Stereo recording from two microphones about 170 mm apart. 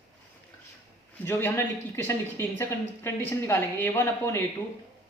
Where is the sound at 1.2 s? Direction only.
15° left (ahead or behind).